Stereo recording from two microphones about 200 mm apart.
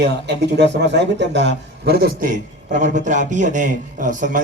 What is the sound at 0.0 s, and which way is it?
A man's voice, 60° right (ahead or behind).